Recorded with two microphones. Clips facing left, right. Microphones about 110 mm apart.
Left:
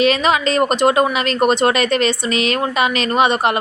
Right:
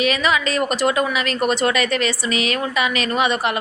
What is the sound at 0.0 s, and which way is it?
A woman's voice, 30° left (ahead or behind).